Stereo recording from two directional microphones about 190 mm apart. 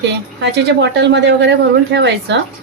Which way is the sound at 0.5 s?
65° right (ahead or behind).